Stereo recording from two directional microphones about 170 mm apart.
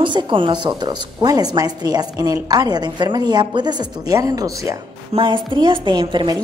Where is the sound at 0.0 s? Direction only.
30° right (ahead or behind).